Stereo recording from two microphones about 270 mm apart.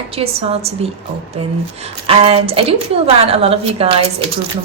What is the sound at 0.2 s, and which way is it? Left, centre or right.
Speech, right.